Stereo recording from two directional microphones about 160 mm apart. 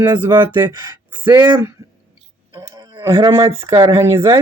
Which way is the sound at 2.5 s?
25° right (ahead or behind).